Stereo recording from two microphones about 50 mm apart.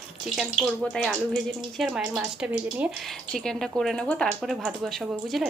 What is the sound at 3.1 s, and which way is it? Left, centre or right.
Speech, centre.